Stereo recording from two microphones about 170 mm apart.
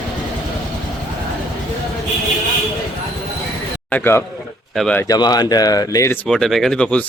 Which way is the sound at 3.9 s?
10° left (ahead or behind).